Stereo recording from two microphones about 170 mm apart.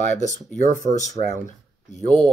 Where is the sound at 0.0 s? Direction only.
45° left (ahead or behind).